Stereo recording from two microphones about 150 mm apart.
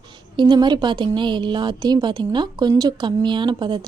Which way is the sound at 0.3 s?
30° right (ahead or behind).